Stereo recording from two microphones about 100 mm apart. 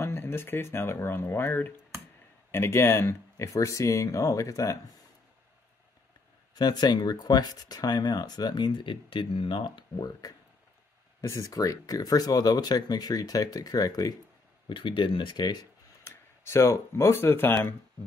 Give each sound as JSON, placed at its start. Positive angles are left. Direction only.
{"t": 0.0, "sound": "speech", "side_deg": 25}
{"t": 6.5, "sound": "speech", "side_deg": 45}
{"t": 11.1, "sound": "speech", "side_deg": 30}
{"t": 14.7, "sound": "speech", "side_deg": 55}
{"t": 16.0, "sound": "speech", "side_deg": 25}